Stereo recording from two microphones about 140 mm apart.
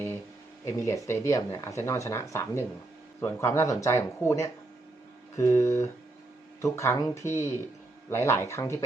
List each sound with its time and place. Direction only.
0.9 s speech: 20° left (ahead or behind)